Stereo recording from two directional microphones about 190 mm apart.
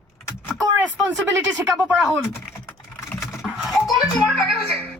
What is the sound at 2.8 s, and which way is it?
Typing, centre (ahead or behind).